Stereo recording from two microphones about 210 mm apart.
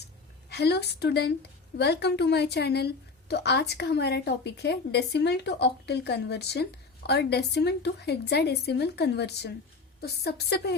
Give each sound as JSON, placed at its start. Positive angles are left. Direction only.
{"t": 0.5, "sound": "a woman's voice", "side_deg": 50}